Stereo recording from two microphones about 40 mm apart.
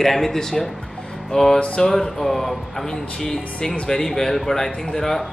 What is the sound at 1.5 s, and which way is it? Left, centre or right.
Speech, left.